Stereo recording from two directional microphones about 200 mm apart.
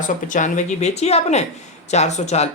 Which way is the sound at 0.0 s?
40° left (ahead or behind).